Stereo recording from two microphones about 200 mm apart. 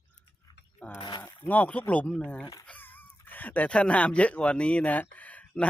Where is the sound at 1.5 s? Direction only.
5° left (ahead or behind).